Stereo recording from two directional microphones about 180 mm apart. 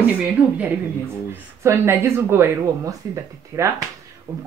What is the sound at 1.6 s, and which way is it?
Speech, 15° right (ahead or behind).